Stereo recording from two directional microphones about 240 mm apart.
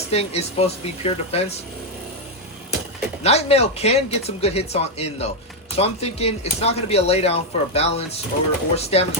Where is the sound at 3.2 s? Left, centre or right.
Left.